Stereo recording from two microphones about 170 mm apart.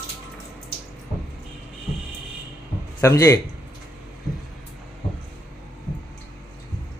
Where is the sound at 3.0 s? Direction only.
15° left (ahead or behind).